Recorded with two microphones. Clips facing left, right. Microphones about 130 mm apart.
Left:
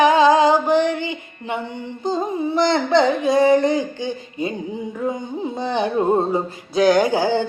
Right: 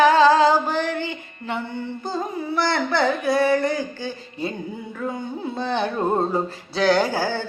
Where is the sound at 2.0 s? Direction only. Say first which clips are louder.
Left 8 dB; 20° left (ahead or behind).